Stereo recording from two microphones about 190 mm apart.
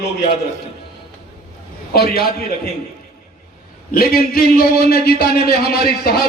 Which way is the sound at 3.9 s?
50° left (ahead or behind).